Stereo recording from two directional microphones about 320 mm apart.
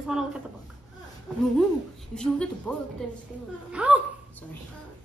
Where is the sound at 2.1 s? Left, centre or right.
Centre.